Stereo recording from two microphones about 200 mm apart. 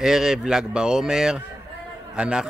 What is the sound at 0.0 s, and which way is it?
Speech, 5° right (ahead or behind).